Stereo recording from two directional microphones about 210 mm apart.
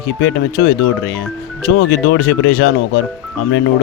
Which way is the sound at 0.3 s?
50° left (ahead or behind).